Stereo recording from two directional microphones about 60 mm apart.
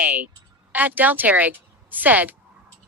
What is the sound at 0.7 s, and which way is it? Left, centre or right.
Speech, right.